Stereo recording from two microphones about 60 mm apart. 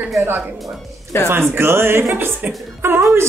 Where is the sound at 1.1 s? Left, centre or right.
Left.